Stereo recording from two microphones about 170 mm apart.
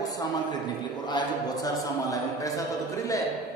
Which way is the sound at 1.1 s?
25° left (ahead or behind).